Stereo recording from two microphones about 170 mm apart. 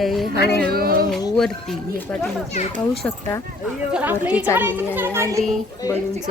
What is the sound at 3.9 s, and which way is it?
A child's voice, 10° right (ahead or behind).